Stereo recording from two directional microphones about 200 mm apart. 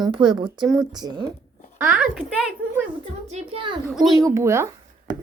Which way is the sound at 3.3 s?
30° right (ahead or behind).